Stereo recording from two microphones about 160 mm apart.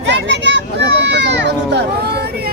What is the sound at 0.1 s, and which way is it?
Children playing, 90° right.